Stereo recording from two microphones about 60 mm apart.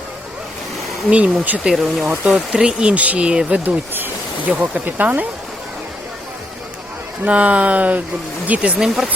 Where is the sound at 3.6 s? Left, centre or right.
Right.